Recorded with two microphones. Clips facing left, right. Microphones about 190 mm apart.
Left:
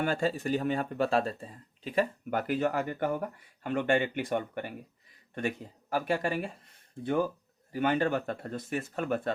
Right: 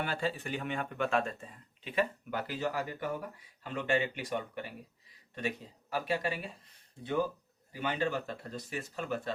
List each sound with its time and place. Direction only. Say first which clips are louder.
0.0 s speech: left 6 dB; 45° left (ahead or behind)